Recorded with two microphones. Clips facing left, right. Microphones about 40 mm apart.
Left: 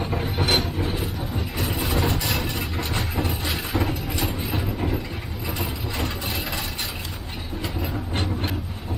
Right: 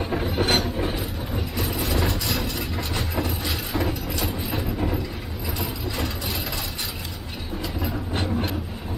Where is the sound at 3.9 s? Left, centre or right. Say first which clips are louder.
Left 1 dB; centre.